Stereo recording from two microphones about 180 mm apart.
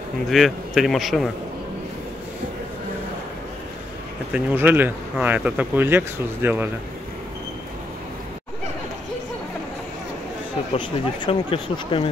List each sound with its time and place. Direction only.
0.3 s a man's voice: centre (ahead or behind)
4.3 s speech: 10° right (ahead or behind)
11.2 s speech: 30° left (ahead or behind)